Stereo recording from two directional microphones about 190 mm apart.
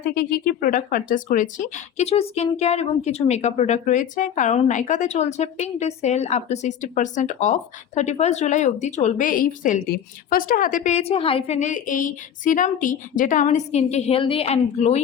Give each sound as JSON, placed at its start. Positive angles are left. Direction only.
{"t": 0.1, "sound": "speech", "side_deg": 55}